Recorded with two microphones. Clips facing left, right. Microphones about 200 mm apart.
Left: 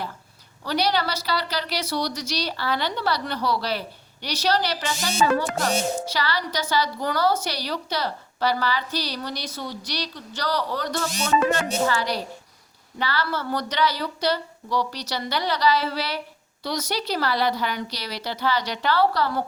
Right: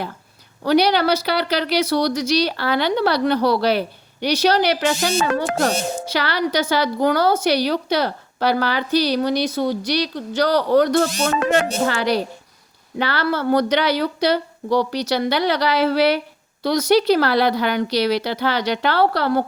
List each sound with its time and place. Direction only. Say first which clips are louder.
0.6 s speech: right 8 dB; 65° right (ahead or behind)